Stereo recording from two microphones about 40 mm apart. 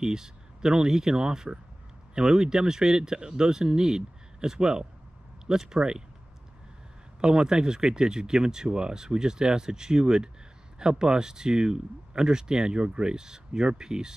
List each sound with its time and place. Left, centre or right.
0.0 s speech: centre
7.2 s speech: centre